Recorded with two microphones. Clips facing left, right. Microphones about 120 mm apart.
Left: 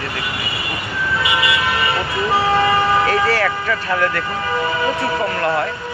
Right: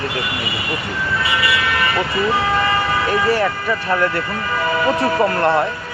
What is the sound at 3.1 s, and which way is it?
Speech, 20° right (ahead or behind).